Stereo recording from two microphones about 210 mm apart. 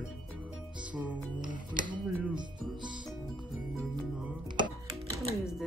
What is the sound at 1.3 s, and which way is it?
Speech, 20° right (ahead or behind).